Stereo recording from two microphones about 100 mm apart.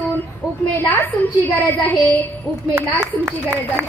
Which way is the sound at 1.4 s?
20° left (ahead or behind).